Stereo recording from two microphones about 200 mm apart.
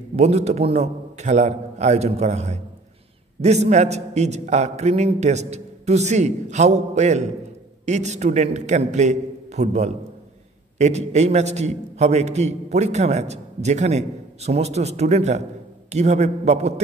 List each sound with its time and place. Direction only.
0.1 s a man's voice: 35° right (ahead or behind)